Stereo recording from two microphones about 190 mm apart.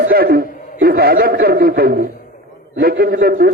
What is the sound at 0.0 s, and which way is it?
A man's voice, 50° right (ahead or behind).